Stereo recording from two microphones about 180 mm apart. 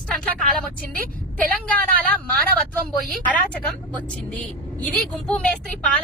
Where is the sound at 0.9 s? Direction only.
50° right (ahead or behind).